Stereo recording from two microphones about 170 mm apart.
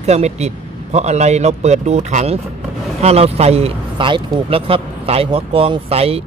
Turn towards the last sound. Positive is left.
turn(degrees=-35)  # may be behind; listen again after turning